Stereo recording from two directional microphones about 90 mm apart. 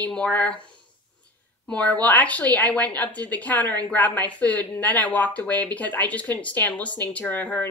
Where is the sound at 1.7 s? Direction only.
15° left (ahead or behind).